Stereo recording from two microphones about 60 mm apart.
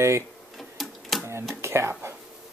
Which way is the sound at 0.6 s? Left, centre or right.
Centre.